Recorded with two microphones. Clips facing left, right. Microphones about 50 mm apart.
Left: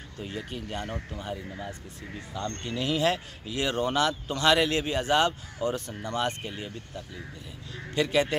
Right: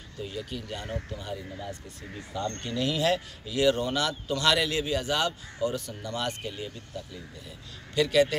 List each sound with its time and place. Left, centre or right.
0.2 s a man's voice: left
7.9 s speech: left